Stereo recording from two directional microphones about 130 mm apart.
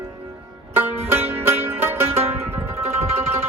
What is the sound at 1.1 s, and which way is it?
Music, 20° right (ahead or behind).